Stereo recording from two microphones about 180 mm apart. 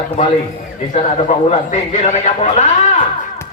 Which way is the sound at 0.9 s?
35° left (ahead or behind).